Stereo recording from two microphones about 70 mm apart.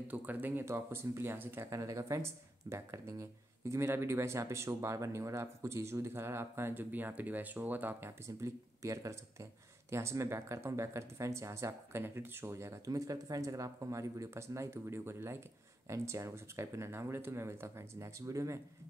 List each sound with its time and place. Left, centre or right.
0.1 s speech: right
1.8 s speech: right
8.4 s speech: right